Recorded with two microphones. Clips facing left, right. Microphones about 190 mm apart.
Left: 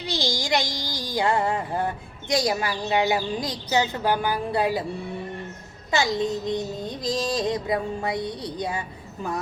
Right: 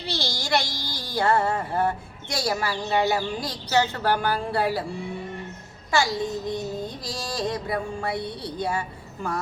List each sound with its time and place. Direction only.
0.1 s a woman's voice: 15° left (ahead or behind)
5.9 s child singing: 20° left (ahead or behind)